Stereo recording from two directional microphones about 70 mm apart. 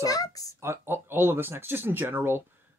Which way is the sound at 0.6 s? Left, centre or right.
Right.